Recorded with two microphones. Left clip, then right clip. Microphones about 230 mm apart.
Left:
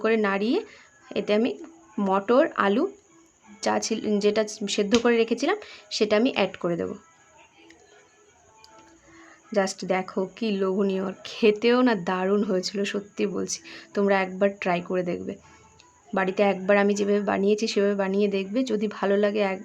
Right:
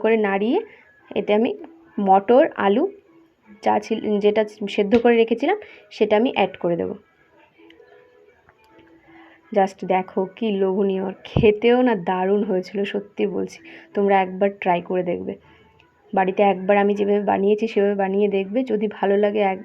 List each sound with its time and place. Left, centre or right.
0.0 s speech: centre
9.5 s speech: centre